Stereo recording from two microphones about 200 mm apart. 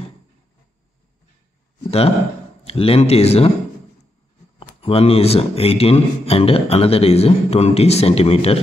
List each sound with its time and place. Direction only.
1.9 s a man's voice: 30° left (ahead or behind)
4.6 s a man's voice: 30° left (ahead or behind)